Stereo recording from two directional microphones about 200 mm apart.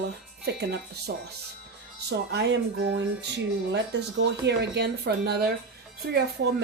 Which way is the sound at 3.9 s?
60° right (ahead or behind).